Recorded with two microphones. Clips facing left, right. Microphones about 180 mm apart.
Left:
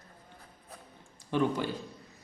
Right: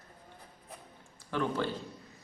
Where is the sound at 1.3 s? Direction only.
15° left (ahead or behind).